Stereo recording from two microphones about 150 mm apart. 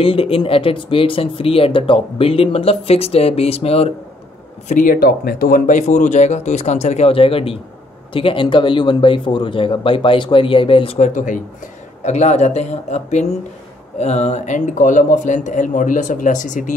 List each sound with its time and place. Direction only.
0.0 s speech: 40° left (ahead or behind)
4.6 s speech: 65° left (ahead or behind); by 11.1 s 35° left (ahead or behind)
11.1 s speech: 60° left (ahead or behind)
12.0 s speech: 50° left (ahead or behind)